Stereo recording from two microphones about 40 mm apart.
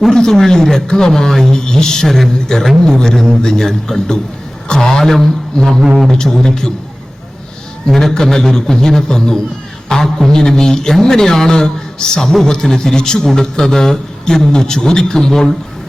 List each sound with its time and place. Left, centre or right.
0.1 s a man's voice: centre
7.9 s a man's voice: centre